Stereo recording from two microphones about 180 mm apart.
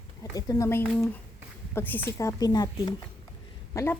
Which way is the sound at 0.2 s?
20° left (ahead or behind).